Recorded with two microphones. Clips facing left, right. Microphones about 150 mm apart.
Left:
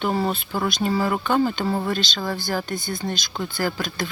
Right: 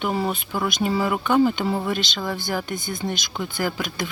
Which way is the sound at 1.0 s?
10° right (ahead or behind).